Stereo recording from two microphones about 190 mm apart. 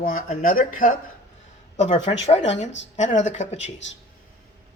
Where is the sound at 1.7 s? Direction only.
35° left (ahead or behind).